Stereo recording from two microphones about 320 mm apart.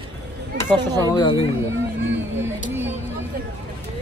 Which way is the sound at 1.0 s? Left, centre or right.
Centre.